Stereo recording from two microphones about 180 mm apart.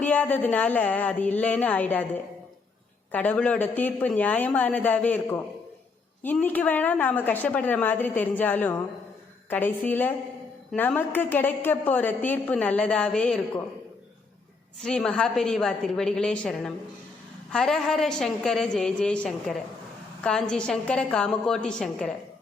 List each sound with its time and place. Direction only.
0.0 s a woman's voice: 10° left (ahead or behind)
3.1 s a woman's voice: 10° left (ahead or behind)
14.8 s a woman's voice: 5° left (ahead or behind)